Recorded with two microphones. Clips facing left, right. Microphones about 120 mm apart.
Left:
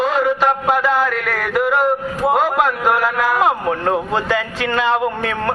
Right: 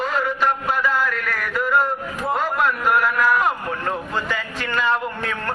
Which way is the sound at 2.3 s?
90° left.